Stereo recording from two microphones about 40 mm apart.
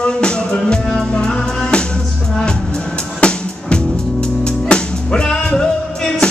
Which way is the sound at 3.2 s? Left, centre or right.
Left.